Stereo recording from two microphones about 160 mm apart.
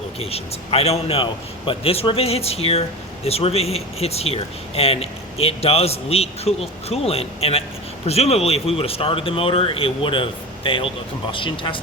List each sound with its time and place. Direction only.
0.2 s speech: 40° left (ahead or behind)